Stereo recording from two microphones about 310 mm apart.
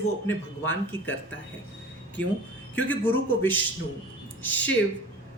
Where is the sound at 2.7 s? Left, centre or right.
Centre.